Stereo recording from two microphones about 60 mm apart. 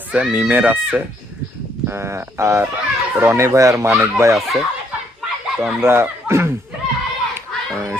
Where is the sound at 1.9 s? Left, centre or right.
Right.